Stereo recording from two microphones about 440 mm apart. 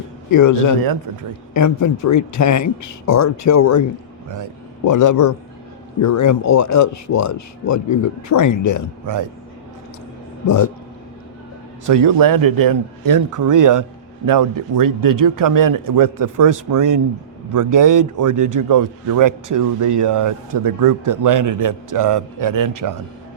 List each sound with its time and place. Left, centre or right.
0.3 s speech: left
4.9 s a man's voice: left
9.0 s a man's voice: right
10.4 s speech: left
11.9 s a man's voice: right